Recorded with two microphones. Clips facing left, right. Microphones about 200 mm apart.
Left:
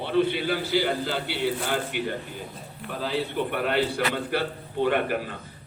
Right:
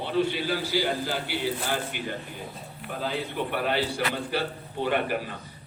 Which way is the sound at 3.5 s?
55° left (ahead or behind).